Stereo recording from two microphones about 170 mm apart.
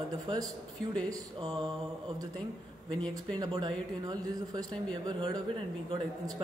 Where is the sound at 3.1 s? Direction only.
20° right (ahead or behind).